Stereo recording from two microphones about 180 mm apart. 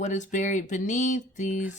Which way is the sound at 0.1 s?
45° left (ahead or behind).